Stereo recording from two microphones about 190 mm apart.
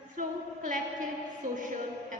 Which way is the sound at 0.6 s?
45° right (ahead or behind).